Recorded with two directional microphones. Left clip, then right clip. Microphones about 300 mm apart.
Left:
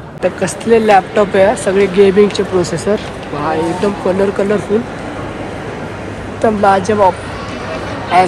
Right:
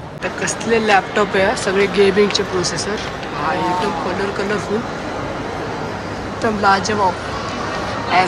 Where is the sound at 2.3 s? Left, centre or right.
Centre.